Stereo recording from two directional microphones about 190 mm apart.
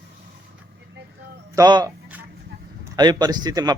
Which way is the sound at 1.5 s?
20° right (ahead or behind).